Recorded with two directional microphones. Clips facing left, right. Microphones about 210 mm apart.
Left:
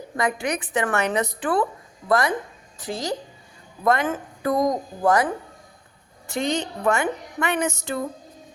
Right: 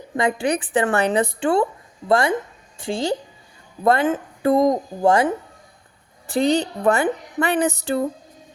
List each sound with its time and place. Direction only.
0.2 s a woman's voice: 30° right (ahead or behind)